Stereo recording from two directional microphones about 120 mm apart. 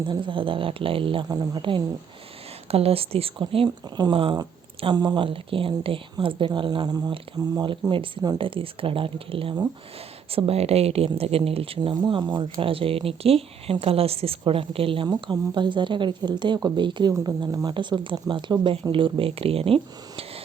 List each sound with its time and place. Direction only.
0.0 s speech: 40° right (ahead or behind)
2.6 s speech: 55° right (ahead or behind)
15.0 s speech: 35° right (ahead or behind); by 20.4 s 50° right (ahead or behind)